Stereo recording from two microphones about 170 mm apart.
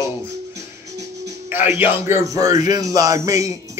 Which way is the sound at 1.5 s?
10° right (ahead or behind).